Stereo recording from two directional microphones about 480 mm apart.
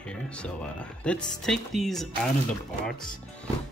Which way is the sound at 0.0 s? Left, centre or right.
Centre.